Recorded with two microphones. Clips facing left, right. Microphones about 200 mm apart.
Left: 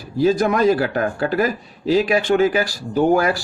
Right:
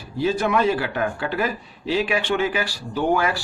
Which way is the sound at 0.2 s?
40° left (ahead or behind).